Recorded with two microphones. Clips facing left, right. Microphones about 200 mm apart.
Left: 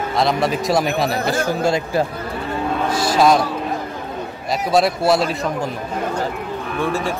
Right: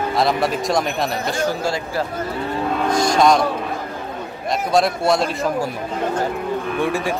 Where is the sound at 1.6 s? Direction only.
20° left (ahead or behind).